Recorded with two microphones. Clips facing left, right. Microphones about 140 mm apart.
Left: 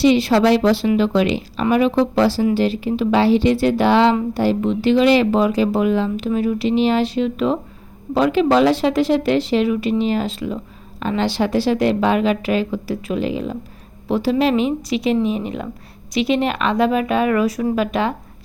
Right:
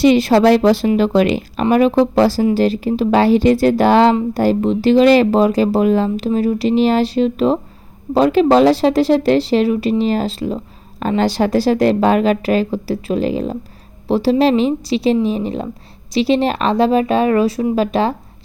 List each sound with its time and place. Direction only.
0.0 s a woman's voice: 45° right (ahead or behind)